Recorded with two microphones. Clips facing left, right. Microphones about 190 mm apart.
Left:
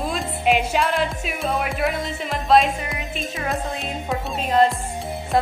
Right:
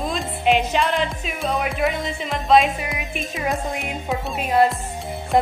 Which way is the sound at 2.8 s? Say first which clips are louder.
Right 1 dB; 15° right (ahead or behind).